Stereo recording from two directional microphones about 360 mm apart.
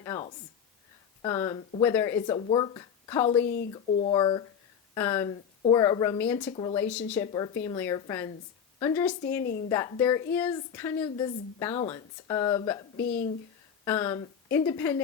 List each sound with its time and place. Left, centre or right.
0.0 s a woman's voice: centre
3.4 s speech: left
4.1 s a woman's voice: centre
6.8 s a woman's voice: centre
13.0 s speech: left
13.8 s a woman's voice: centre